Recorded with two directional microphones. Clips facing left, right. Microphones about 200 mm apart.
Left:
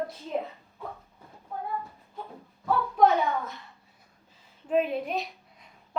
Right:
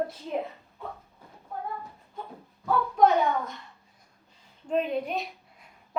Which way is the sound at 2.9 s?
Centre (ahead or behind).